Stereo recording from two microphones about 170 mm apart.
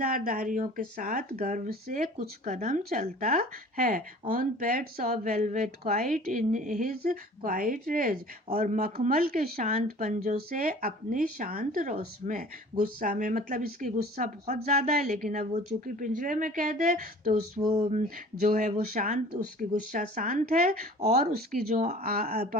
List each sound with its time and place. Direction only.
0.0 s speech: 60° right (ahead or behind)
17.7 s speech: 40° right (ahead or behind)
21.7 s speech: 40° right (ahead or behind)
22.0 s speech: 60° right (ahead or behind)